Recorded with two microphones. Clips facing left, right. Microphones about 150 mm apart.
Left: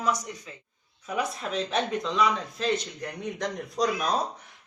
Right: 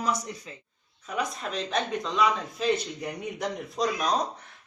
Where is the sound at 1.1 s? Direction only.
5° left (ahead or behind).